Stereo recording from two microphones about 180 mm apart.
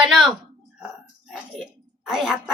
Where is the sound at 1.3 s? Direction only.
Centre (ahead or behind).